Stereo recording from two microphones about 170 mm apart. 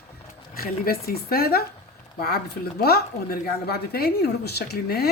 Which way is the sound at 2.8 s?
65° left (ahead or behind).